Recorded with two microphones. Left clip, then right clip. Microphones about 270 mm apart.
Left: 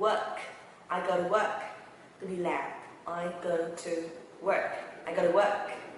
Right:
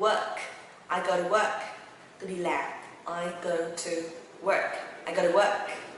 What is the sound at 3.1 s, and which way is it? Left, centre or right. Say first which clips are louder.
A woman's voice: right 1 dB; centre.